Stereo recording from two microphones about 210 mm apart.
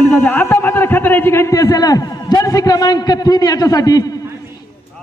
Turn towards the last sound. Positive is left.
turn(degrees=15)  # may be behind; listen again after turning